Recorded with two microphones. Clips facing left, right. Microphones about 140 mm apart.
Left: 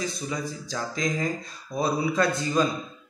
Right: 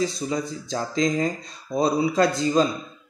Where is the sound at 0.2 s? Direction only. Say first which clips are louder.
Right 4 dB; 30° right (ahead or behind).